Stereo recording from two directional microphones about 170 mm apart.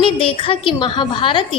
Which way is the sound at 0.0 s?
30° left (ahead or behind).